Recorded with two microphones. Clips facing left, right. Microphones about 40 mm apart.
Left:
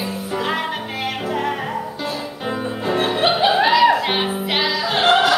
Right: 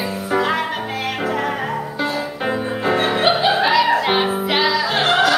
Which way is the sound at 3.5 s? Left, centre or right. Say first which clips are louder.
Left 1 dB; centre.